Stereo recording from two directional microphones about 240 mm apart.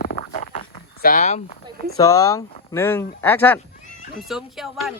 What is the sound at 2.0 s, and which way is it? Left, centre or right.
Speech, centre.